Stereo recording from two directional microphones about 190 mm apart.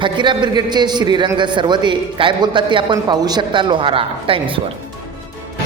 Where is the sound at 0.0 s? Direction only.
25° right (ahead or behind).